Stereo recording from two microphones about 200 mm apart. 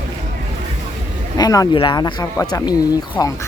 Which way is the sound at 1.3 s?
20° left (ahead or behind).